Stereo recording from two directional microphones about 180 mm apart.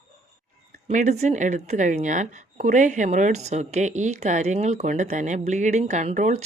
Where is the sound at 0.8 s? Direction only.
40° right (ahead or behind).